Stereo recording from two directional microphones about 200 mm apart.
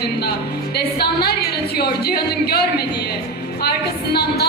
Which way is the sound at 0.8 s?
50° left (ahead or behind).